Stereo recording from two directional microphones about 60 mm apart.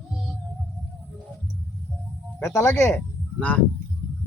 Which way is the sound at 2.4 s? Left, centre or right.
Left.